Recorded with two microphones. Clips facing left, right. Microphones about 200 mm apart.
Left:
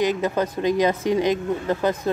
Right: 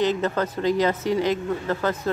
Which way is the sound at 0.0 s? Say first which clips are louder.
Left 1 dB; 10° left (ahead or behind).